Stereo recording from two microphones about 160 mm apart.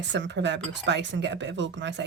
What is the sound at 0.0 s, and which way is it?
Speech, 90° right.